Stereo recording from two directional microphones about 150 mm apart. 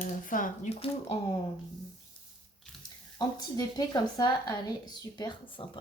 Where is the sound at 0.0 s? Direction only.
65° left (ahead or behind).